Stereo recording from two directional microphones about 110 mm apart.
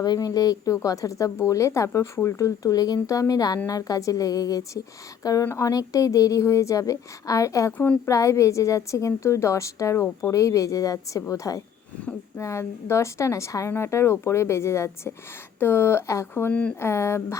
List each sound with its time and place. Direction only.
0.0 s a woman's voice: 35° left (ahead or behind)
16.5 s speech: 10° left (ahead or behind)
16.8 s a woman's voice: 25° left (ahead or behind)